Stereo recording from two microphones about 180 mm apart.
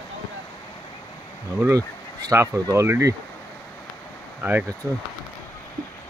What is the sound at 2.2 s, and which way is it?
Speech, 15° right (ahead or behind).